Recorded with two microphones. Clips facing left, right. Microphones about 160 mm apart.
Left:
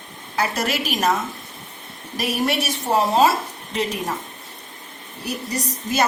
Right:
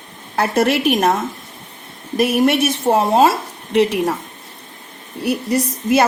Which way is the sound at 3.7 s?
65° right (ahead or behind).